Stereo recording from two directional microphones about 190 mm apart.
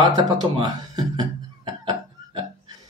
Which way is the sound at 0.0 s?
20° right (ahead or behind).